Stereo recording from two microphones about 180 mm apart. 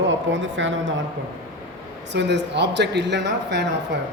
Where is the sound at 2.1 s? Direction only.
70° right (ahead or behind).